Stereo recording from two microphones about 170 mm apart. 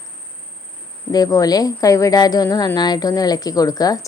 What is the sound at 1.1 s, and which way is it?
A woman's voice, 20° left (ahead or behind).